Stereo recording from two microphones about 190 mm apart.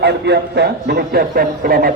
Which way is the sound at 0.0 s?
60° right (ahead or behind).